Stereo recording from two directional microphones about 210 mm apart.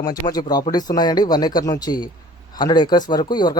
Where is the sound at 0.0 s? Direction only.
20° left (ahead or behind).